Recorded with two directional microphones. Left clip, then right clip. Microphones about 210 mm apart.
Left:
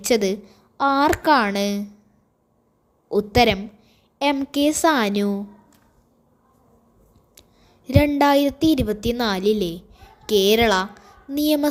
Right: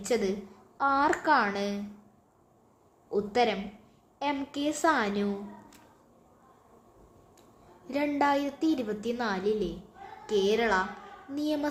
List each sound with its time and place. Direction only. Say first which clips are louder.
0.0 s a woman's voice: left 9 dB; 35° left (ahead or behind)
3.1 s a woman's voice: left 9 dB; 35° left (ahead or behind)
7.9 s a woman's voice: left 10 dB; 35° left (ahead or behind)